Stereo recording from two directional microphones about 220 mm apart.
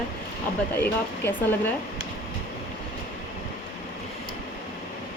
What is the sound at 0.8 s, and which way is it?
Speech, 10° left (ahead or behind).